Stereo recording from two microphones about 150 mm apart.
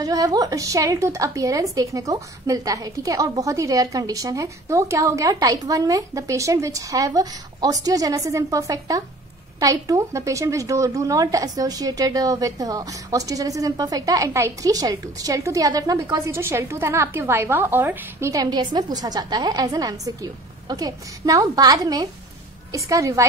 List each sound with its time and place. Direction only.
0.0 s speech: 25° right (ahead or behind)